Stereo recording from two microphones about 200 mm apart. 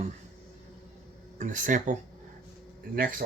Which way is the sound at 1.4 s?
40° right (ahead or behind).